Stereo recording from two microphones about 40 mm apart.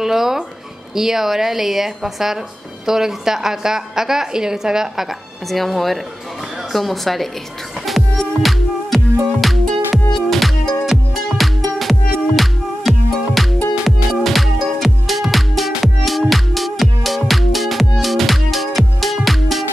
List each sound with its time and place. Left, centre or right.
0.0 s a woman's voice: centre
5.5 s a woman's voice: centre
7.8 s music: centre